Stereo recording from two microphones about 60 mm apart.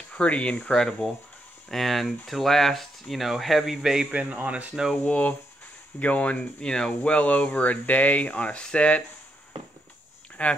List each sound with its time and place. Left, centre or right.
0.1 s speech: left
0.7 s speech: centre
4.1 s speech: centre
5.0 s speech: left
7.0 s speech: left
10.4 s speech: left